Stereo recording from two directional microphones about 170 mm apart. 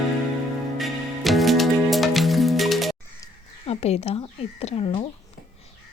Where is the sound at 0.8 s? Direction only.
Centre (ahead or behind).